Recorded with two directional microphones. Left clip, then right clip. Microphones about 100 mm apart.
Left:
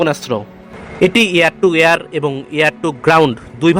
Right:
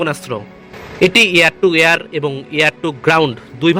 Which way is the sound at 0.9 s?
25° left (ahead or behind).